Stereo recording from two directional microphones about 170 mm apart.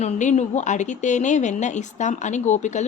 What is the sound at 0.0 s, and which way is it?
A woman's voice, 45° left (ahead or behind).